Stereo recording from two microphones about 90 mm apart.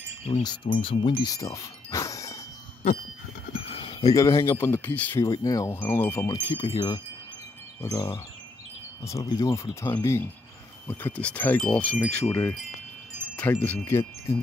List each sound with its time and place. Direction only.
0.4 s chime: 50° left (ahead or behind)
0.7 s speech: 75° left (ahead or behind)
1.2 s a sound: 40° left (ahead or behind)
3.7 s wind chime: 90° left
4.0 s speech: 40° left (ahead or behind); by 5.2 s 20° left (ahead or behind)
5.2 s speech: 40° left (ahead or behind)
5.7 s speech: 25° left (ahead or behind)
6.3 s chime: 55° left (ahead or behind)
7.8 s speech: 30° left (ahead or behind)
10.9 s chime: 20° left (ahead or behind)
13.8 s speech: 30° left (ahead or behind)